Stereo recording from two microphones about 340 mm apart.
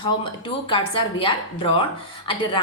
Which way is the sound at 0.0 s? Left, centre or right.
Centre.